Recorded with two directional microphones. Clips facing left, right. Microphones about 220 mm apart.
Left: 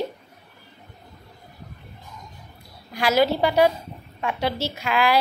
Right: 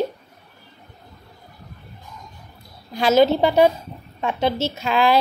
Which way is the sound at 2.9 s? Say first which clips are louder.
Right 4 dB; 25° right (ahead or behind).